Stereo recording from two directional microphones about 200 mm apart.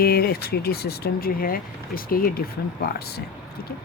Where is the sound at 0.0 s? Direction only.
50° left (ahead or behind).